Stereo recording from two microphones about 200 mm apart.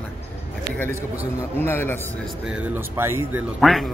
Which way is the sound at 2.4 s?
5° right (ahead or behind).